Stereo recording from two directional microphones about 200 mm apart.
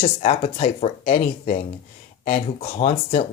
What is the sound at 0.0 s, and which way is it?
Speech, 35° left (ahead or behind).